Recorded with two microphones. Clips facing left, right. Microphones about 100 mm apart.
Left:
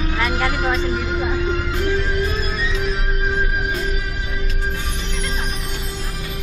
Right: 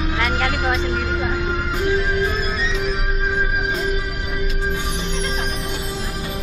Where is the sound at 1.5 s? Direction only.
10° right (ahead or behind).